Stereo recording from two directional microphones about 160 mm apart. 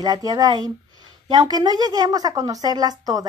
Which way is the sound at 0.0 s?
25° right (ahead or behind).